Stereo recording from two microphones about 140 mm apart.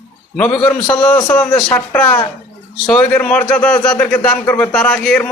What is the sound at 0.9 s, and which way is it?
A man's voice, 10° left (ahead or behind).